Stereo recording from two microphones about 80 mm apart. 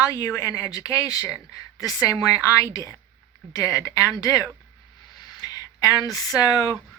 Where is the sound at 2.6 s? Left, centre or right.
Left.